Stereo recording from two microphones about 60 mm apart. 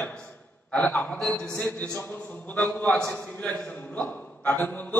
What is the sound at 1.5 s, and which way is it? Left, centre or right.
A man's voice, left.